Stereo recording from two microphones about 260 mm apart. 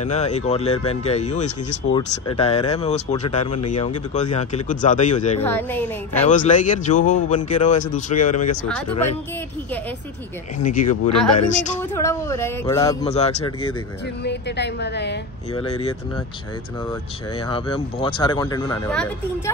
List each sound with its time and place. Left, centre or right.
0.0 s speech: left
3.5 s speech: left
4.1 s speech: left
5.4 s speech: centre
6.2 s speech: left
10.8 s speech: left
11.8 s speech: centre
13.0 s speech: left
14.2 s a woman's voice: left
17.5 s speech: centre
18.9 s speech: centre